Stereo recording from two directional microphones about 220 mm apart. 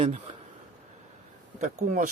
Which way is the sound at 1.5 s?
35° right (ahead or behind).